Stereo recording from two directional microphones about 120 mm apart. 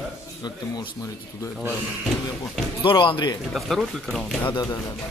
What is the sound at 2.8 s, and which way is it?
Speech, 45° left (ahead or behind).